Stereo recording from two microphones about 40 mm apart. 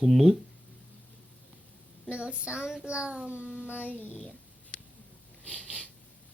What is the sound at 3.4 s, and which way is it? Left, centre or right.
Child singing, left.